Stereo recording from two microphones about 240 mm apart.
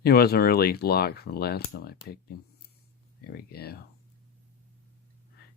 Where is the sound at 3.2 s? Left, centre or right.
Left.